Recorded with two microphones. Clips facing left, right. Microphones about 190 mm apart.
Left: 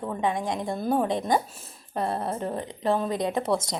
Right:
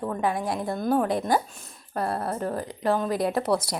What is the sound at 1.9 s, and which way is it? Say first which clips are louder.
Speech: even; 20° left (ahead or behind).